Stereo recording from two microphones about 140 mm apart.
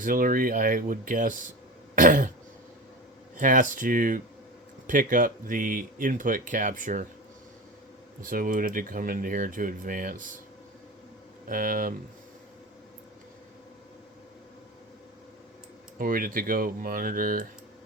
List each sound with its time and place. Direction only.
0.0 s speech: 75° right (ahead or behind)
3.3 s speech: 65° right (ahead or behind)
8.2 s speech: 80° right
11.4 s speech: 75° right (ahead or behind)
16.0 s speech: 90° right